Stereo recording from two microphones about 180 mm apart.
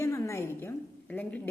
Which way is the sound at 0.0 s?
15° left (ahead or behind).